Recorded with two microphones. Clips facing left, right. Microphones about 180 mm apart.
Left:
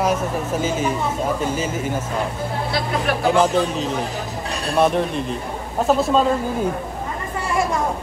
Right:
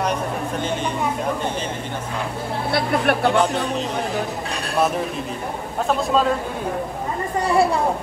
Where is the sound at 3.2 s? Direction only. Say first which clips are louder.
Left 2 dB; centre (ahead or behind).